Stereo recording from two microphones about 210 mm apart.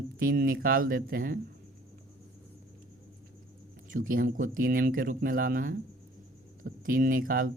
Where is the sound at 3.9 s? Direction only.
40° right (ahead or behind).